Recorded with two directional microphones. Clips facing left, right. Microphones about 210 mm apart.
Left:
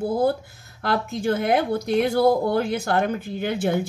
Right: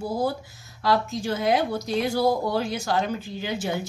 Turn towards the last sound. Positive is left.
turn(degrees=55)  # may be behind; listen again after turning